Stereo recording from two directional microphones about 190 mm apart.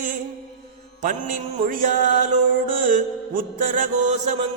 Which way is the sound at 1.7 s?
45° right (ahead or behind).